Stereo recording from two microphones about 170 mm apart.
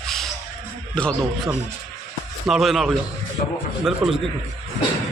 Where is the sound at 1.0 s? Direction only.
5° left (ahead or behind).